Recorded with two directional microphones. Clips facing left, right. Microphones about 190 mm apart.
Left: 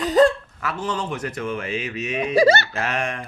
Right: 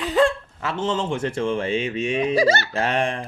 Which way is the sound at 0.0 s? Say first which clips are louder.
Left 3 dB; 40° left (ahead or behind).